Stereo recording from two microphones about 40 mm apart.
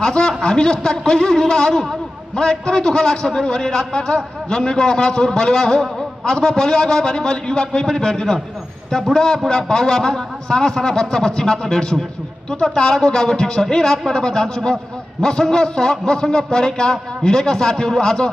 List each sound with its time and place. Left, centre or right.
0.0 s a man's voice: centre